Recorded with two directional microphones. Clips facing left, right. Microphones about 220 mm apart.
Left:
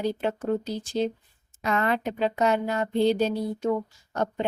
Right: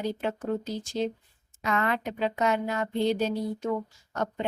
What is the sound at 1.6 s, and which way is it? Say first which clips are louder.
Speech: left 3 dB; 35° left (ahead or behind).